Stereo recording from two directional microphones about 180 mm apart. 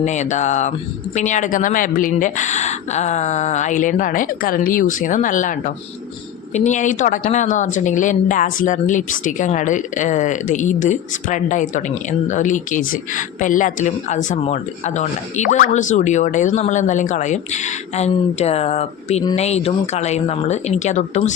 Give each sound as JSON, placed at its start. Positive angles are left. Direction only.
{"t": 0.0, "sound": "a woman's voice", "side_deg": 40}